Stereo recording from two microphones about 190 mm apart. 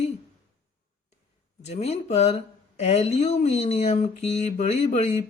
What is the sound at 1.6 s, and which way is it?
Speech, 35° left (ahead or behind).